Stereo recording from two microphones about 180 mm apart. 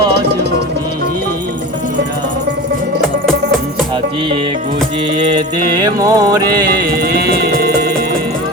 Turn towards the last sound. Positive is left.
turn(degrees=-60)  # may be behind; listen again after turning